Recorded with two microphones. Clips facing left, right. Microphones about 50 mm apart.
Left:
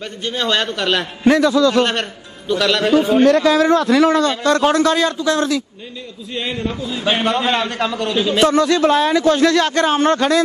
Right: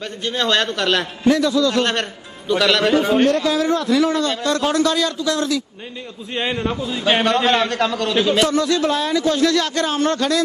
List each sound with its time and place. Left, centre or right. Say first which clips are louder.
0.2 s a man's voice: even; centre
1.2 s a man's voice: left 4 dB; left
1.9 s a man's voice: left 1 dB; centre
2.9 s a man's voice: left 2 dB; right
3.3 s a man's voice: left 5 dB; left
6.3 s a man's voice: right 1 dB; right
7.0 s a man's voice: right 1 dB; centre
7.2 s a man's voice: right 1 dB; centre
8.1 s a man's voice: right 1 dB; centre
8.4 s a man's voice: left 4 dB; left